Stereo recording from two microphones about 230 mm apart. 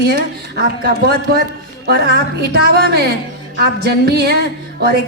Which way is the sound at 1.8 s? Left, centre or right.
Right.